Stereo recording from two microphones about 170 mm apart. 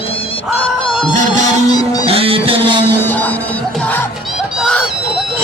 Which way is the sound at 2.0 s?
35° right (ahead or behind).